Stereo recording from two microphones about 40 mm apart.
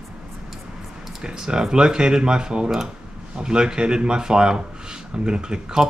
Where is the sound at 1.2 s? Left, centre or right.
Centre.